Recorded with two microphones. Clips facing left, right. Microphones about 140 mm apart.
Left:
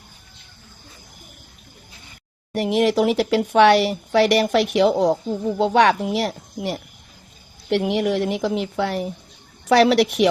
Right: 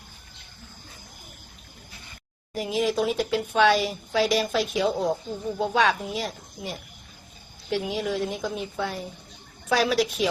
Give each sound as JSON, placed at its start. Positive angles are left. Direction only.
{"t": 2.5, "sound": "speech", "side_deg": 65}